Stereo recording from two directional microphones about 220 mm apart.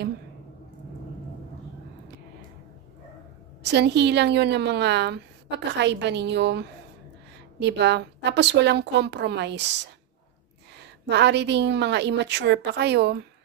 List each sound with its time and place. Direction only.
3.6 s a woman's voice: 50° right (ahead or behind)
10.8 s a woman's voice: 50° right (ahead or behind)